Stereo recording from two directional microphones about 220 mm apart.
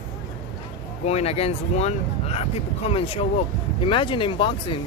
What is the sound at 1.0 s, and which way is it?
Speech, 30° left (ahead or behind).